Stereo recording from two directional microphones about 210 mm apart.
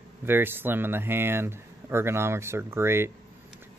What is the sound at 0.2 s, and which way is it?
Speech, 10° right (ahead or behind).